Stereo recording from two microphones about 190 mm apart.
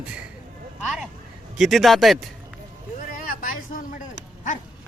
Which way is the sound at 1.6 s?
Centre (ahead or behind).